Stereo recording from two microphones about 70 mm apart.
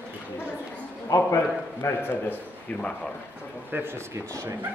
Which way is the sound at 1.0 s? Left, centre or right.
Left.